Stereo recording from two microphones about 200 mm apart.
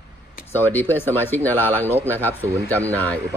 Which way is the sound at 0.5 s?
10° left (ahead or behind).